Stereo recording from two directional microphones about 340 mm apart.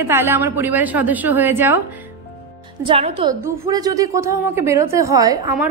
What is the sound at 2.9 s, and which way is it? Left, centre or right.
A woman's voice, centre.